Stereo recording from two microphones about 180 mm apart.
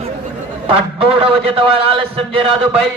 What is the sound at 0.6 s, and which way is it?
A man's voice, 30° right (ahead or behind).